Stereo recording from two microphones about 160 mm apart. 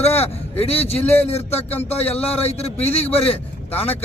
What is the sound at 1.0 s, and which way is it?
Speech, 10° left (ahead or behind).